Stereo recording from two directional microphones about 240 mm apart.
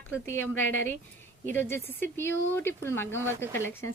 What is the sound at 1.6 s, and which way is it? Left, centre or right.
Speech, centre.